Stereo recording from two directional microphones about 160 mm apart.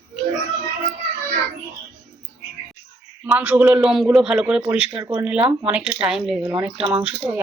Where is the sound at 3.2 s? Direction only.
10° right (ahead or behind).